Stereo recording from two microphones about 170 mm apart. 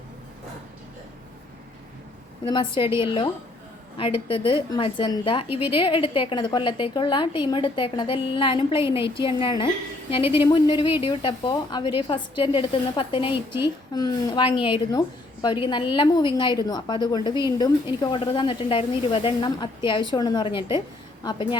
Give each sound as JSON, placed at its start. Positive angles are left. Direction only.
{"t": 2.4, "sound": "a woman's voice", "side_deg": 30}